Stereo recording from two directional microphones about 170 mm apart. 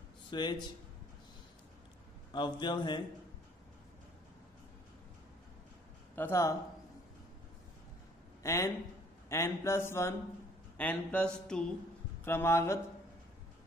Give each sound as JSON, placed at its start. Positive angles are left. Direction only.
{"t": 0.3, "sound": "speech", "side_deg": 25}
{"t": 2.3, "sound": "a man's voice", "side_deg": 25}
{"t": 6.1, "sound": "mantra", "side_deg": 15}
{"t": 8.4, "sound": "speech", "side_deg": 15}
{"t": 9.3, "sound": "mantra", "side_deg": 15}